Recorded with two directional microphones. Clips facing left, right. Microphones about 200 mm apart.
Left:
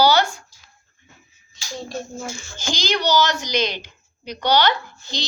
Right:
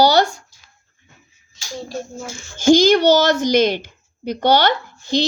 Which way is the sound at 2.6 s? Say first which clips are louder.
Right 13 dB; 50° right (ahead or behind).